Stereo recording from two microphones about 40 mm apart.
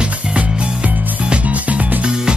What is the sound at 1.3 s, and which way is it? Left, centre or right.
Music, right.